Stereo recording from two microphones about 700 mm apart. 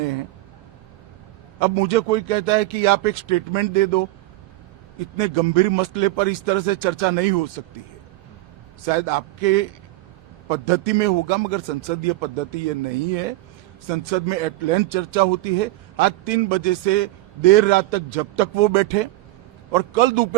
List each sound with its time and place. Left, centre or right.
1.5 s a man's voice: right
5.1 s a man's voice: right
8.9 s a man's voice: right
13.8 s a man's voice: right